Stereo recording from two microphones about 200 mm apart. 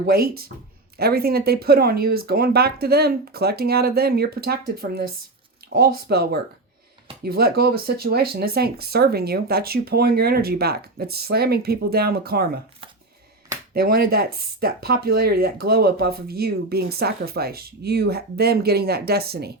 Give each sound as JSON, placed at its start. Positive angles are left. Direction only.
{"t": 0.0, "sound": "speech", "side_deg": -50}
{"t": 13.7, "sound": "speech", "side_deg": -50}